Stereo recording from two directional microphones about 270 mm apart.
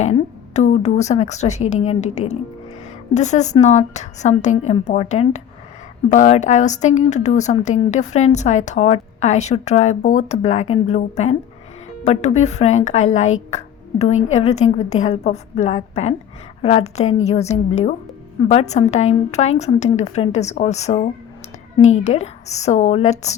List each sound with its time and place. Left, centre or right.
0.0 s speech: left
13.5 s music: left
14.3 s speech: left